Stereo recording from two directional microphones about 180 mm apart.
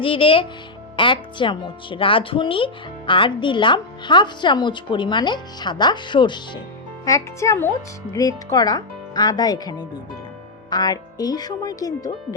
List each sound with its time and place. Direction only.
0.0 s speech: 30° left (ahead or behind)